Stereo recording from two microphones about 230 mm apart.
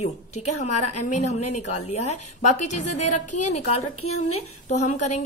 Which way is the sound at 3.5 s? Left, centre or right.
Left.